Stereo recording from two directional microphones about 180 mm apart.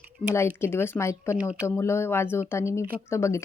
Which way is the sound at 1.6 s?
15° left (ahead or behind).